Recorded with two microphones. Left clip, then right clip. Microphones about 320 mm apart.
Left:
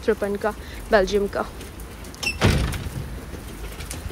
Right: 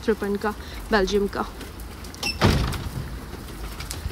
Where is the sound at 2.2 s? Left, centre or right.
Right.